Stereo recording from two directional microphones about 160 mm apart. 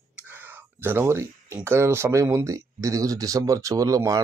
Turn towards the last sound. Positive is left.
turn(degrees=-20)  # may be behind; listen again after turning